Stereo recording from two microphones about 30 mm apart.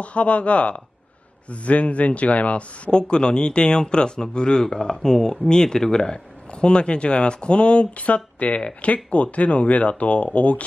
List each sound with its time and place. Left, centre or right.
0.0 s speech: left
2.9 s speech: left
6.5 s speech: left